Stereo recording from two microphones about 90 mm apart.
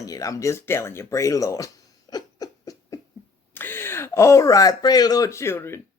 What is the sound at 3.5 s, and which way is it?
Speech, 25° left (ahead or behind).